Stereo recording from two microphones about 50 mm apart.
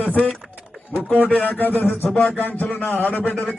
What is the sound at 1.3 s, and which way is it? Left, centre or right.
Speech, left.